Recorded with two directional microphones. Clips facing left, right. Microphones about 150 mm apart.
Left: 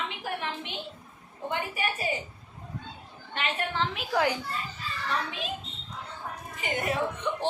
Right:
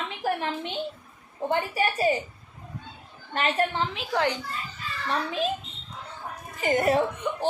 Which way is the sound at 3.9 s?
5° left (ahead or behind).